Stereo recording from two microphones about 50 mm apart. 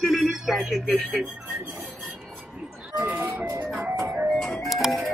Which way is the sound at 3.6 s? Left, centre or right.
Right.